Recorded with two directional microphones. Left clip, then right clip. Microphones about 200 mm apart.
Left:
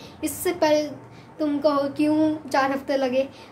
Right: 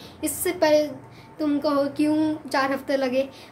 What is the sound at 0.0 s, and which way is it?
A woman's voice, centre (ahead or behind).